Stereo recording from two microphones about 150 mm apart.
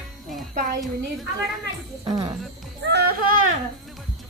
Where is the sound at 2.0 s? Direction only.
25° right (ahead or behind).